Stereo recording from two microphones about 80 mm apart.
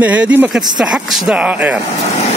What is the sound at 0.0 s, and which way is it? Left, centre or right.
Speech, centre.